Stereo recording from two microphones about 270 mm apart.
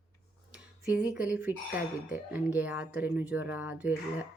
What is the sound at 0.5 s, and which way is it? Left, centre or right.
Speech, centre.